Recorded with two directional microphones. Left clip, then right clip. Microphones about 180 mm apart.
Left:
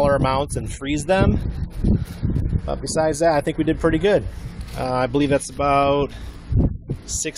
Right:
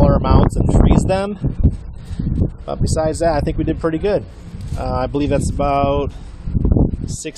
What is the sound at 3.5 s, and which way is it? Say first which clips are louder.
A man's voice: even; 5° right (ahead or behind).